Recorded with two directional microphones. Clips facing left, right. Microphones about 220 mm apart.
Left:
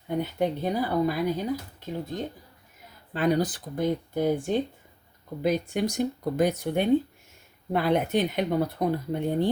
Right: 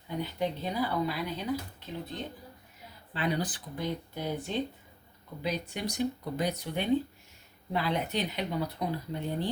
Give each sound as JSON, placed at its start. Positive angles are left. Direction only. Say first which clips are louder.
{"t": 0.1, "sound": "speech", "louder": "left 6 dB", "side_deg": 50}